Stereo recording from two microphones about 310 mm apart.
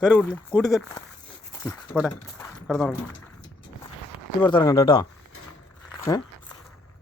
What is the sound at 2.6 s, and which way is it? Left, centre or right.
Speech, centre.